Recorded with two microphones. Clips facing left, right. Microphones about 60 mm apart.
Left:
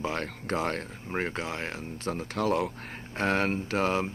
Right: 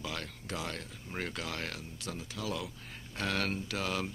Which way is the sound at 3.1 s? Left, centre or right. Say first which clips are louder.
Left 7 dB; left.